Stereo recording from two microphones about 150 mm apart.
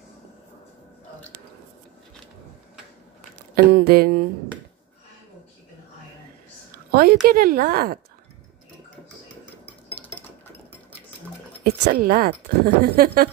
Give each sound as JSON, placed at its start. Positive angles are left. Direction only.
{"t": 3.7, "sound": "speech", "side_deg": -90}
{"t": 6.9, "sound": "a woman's voice", "side_deg": -90}
{"t": 7.2, "sound": "a woman's voice", "side_deg": -75}
{"t": 9.7, "sound": "dishes", "side_deg": 10}
{"t": 11.6, "sound": "speech", "side_deg": -80}